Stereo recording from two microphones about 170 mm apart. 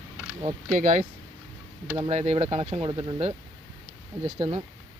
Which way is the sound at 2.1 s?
40° right (ahead or behind).